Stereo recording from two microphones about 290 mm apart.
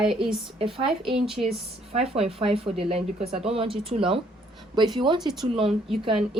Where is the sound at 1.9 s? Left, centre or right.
Right.